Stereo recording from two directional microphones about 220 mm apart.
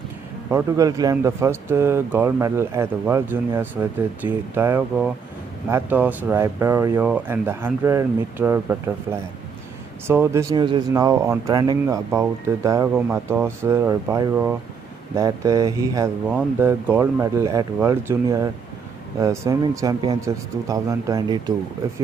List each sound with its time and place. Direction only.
0.5 s speech: 15° right (ahead or behind)